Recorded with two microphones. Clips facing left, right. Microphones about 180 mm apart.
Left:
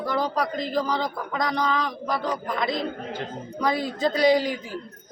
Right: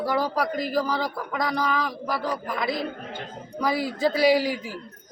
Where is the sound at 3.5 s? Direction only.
5° right (ahead or behind).